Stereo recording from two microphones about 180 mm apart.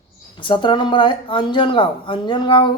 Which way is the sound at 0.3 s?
25° left (ahead or behind).